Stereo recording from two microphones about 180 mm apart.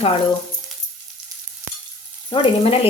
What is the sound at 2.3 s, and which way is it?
Frying, 30° left (ahead or behind).